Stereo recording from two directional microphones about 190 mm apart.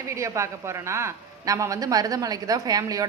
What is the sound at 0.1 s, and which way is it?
A woman's voice, 15° right (ahead or behind).